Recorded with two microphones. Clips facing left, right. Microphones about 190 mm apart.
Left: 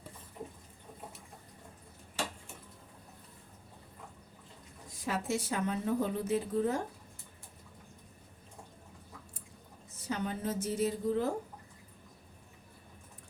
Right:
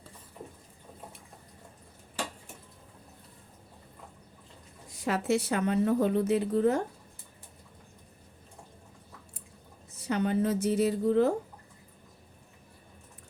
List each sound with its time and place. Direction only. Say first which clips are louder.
5.0 s speech: right 6 dB; 70° right (ahead or behind)
10.1 s speech: right 8 dB; 70° right (ahead or behind)